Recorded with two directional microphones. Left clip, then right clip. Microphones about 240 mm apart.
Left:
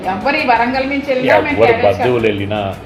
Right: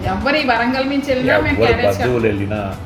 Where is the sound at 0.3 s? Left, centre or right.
Centre.